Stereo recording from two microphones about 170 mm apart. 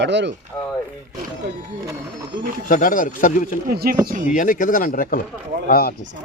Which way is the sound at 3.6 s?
60° right (ahead or behind).